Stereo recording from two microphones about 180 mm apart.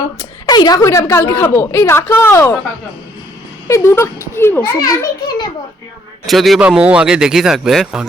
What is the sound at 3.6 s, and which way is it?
A woman's voice, 15° left (ahead or behind).